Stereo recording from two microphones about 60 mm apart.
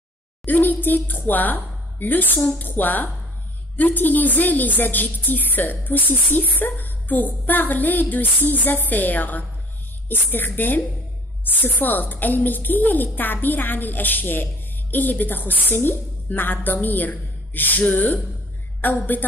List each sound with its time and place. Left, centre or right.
0.5 s a woman's voice: left